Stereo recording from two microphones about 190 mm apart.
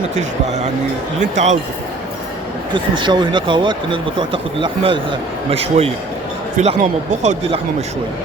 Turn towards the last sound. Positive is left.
turn(degrees=-35)  # may be behind; listen again after turning